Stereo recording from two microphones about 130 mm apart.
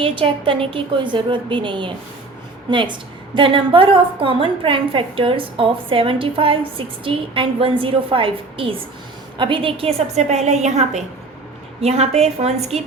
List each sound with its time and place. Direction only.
0.0 s a woman's voice: 40° right (ahead or behind)